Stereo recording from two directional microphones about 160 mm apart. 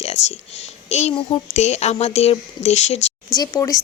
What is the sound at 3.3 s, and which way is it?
Speech, 25° left (ahead or behind).